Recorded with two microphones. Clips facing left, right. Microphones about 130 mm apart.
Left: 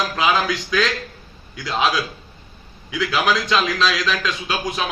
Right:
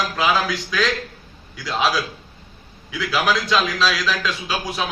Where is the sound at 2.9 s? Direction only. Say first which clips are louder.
Left 1 dB; centre (ahead or behind).